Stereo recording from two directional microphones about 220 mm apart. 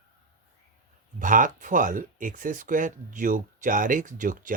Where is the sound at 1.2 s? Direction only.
35° right (ahead or behind).